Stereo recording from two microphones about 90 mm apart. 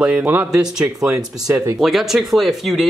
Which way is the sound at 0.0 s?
15° right (ahead or behind).